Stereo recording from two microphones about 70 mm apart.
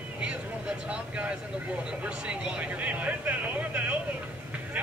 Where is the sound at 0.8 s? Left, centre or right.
Centre.